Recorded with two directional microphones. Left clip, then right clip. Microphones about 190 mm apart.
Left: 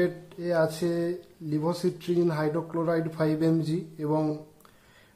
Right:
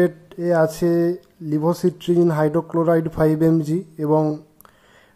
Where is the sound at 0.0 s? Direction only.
30° right (ahead or behind).